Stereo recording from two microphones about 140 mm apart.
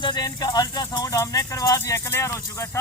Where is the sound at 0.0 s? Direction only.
30° left (ahead or behind).